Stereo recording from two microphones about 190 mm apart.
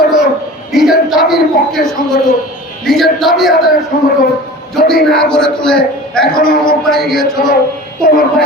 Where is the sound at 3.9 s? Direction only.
55° left (ahead or behind).